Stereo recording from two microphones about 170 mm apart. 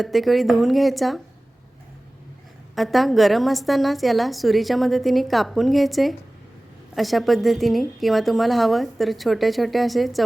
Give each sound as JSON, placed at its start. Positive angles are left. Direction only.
{"t": 0.0, "sound": "a woman's voice", "side_deg": 0}
{"t": 2.7, "sound": "a woman's voice", "side_deg": 0}